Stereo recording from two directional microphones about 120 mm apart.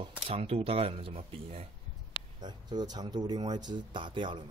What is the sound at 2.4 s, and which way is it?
Speech, 35° right (ahead or behind).